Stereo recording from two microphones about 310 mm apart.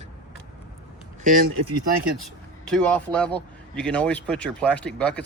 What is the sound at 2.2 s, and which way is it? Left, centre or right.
Speech, centre.